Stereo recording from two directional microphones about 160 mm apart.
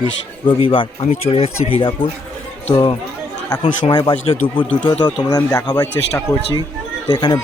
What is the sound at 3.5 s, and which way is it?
Speech, 30° left (ahead or behind).